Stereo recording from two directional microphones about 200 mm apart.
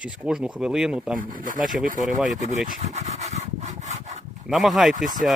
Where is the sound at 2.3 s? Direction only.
35° right (ahead or behind).